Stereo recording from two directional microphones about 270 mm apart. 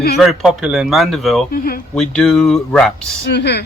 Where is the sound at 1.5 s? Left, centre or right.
Left.